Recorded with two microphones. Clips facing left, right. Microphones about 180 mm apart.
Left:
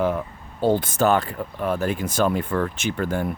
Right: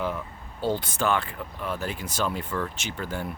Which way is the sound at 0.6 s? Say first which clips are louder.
Left 7 dB; 50° left (ahead or behind).